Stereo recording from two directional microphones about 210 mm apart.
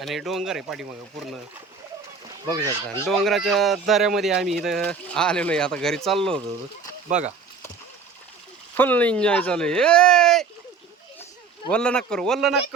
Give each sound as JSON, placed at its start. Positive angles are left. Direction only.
{"t": 0.0, "sound": "speech", "side_deg": 0}
{"t": 2.5, "sound": "speech", "side_deg": -15}
{"t": 3.1, "sound": "speech", "side_deg": 0}
{"t": 7.1, "sound": "speech", "side_deg": -35}
{"t": 8.7, "sound": "speech", "side_deg": 10}
{"t": 11.7, "sound": "speech", "side_deg": 5}